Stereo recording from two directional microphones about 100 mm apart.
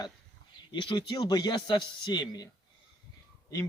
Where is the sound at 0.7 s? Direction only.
50° left (ahead or behind).